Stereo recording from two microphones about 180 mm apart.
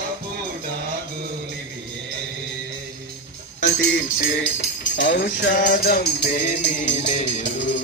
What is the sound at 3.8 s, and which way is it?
Music, 55° left (ahead or behind).